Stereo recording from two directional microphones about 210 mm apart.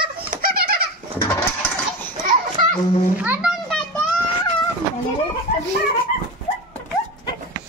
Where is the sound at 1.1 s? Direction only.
15° left (ahead or behind).